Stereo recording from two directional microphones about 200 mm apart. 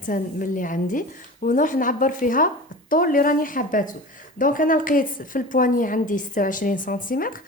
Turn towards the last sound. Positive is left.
turn(degrees=45)  # may be behind; listen again after turning